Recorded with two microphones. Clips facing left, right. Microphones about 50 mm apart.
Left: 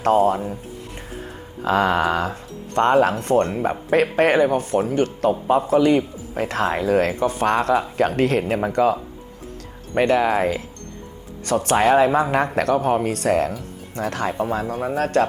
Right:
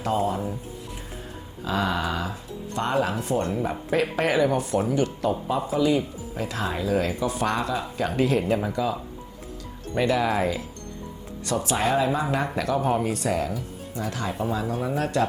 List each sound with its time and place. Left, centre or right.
0.0 s speech: left
1.6 s speech: left
4.4 s speech: left
13.1 s speech: left
14.5 s speech: left